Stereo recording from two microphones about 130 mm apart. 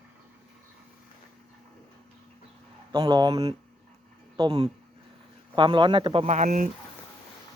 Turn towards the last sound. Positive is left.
turn(degrees=-80)